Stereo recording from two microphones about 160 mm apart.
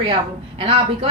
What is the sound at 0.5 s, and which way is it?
Speech, 35° right (ahead or behind).